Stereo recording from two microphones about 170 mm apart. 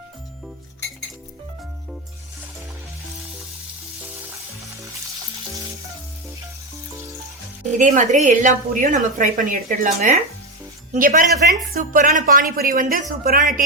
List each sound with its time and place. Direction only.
7.8 s a woman's voice: 50° right (ahead or behind)